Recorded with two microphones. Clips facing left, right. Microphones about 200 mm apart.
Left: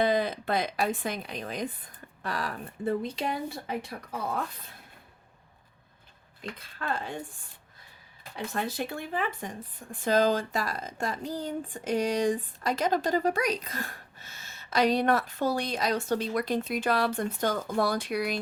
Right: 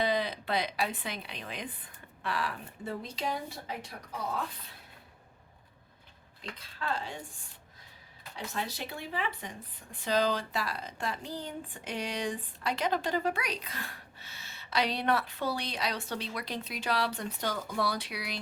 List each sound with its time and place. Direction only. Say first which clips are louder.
0.0 s speech: left 5 dB; 50° left (ahead or behind)
6.4 s speech: left 2 dB; 50° left (ahead or behind)
8.4 s speech: left 5 dB; 50° left (ahead or behind)